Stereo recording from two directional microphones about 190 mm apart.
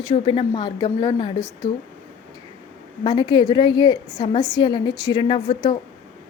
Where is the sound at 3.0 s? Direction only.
25° left (ahead or behind).